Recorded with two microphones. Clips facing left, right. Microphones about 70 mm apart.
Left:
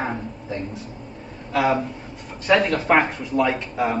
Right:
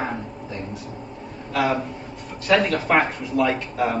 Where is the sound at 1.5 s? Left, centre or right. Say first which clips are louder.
Left 2 dB; centre.